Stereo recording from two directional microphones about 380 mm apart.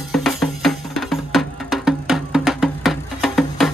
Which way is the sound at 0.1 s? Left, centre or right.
Centre.